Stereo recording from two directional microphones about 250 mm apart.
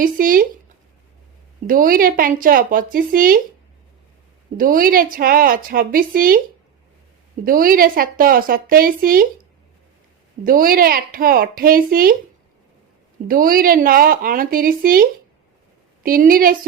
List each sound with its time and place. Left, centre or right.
0.0 s a woman's voice: right
1.6 s a woman's voice: right
4.5 s a woman's voice: right
7.4 s a woman's voice: right
13.2 s a woman's voice: right
16.0 s a woman's voice: right